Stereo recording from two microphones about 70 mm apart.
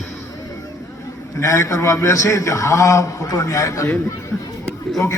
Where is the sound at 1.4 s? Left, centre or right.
Left.